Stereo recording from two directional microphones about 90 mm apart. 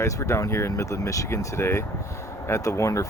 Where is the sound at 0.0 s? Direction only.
35° left (ahead or behind).